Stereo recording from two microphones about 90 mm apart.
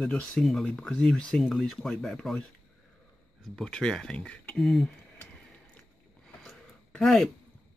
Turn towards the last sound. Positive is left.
turn(degrees=5)  # may be behind; listen again after turning